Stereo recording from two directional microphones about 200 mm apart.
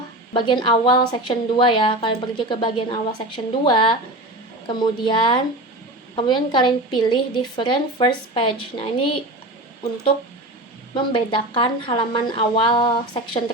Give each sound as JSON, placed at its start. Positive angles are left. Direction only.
{"t": 0.3, "sound": "a woman's voice", "side_deg": 25}
{"t": 10.9, "sound": "a woman's voice", "side_deg": 25}